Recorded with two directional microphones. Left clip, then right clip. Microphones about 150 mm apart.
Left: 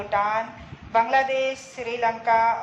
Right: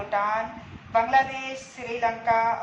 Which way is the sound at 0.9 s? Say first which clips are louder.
Left 2 dB; 30° left (ahead or behind).